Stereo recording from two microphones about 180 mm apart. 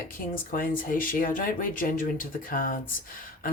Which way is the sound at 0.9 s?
50° left (ahead or behind).